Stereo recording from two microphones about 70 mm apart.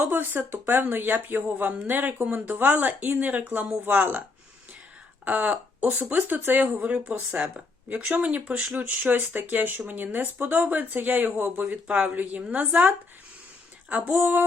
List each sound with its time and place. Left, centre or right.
0.0 s speech: right
5.2 s speech: right
13.9 s speech: right